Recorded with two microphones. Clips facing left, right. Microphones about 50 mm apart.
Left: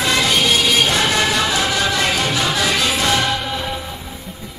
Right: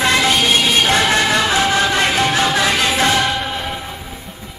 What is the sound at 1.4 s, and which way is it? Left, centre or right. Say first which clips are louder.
Music: right 3 dB; right.